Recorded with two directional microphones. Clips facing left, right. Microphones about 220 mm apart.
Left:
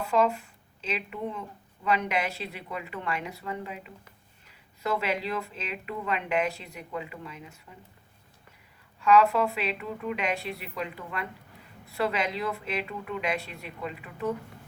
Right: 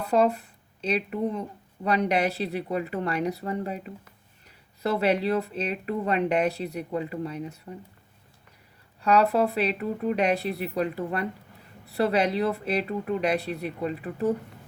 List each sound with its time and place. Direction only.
0.0 s speech: 35° right (ahead or behind)
9.0 s speech: 35° right (ahead or behind)